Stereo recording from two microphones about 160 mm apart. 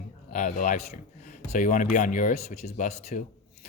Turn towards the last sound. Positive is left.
turn(degrees=45)  # may be behind; listen again after turning